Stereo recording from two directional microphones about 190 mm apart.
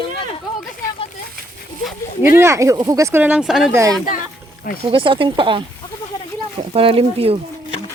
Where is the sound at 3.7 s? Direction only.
15° right (ahead or behind).